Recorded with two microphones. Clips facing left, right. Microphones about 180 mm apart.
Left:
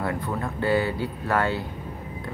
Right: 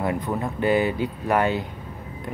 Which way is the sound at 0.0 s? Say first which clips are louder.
Right 3 dB; 20° right (ahead or behind).